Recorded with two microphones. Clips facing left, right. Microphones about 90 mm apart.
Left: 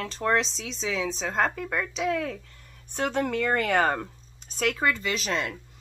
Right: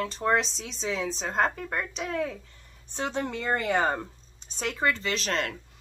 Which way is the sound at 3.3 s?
20° right (ahead or behind).